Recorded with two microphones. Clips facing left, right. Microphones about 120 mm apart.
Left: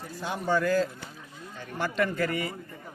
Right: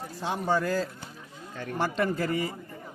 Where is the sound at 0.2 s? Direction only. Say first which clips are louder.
Even; 30° right (ahead or behind).